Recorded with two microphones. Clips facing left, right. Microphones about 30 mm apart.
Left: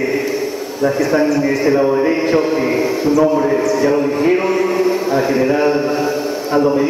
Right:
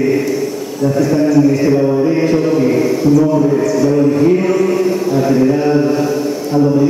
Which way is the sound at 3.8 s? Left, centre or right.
Left.